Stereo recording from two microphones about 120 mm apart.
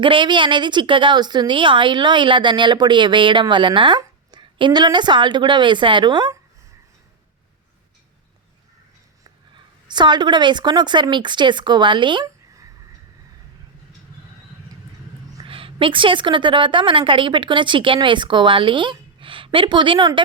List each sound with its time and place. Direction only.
0.0 s a woman's voice: 45° right (ahead or behind)
9.9 s a woman's voice: 40° right (ahead or behind)
15.4 s a woman's voice: 50° right (ahead or behind)